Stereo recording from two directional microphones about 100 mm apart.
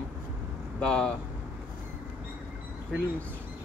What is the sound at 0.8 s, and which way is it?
Speech, 10° left (ahead or behind).